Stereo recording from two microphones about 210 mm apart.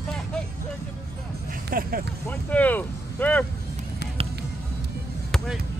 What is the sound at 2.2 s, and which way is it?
Speech, 10° left (ahead or behind).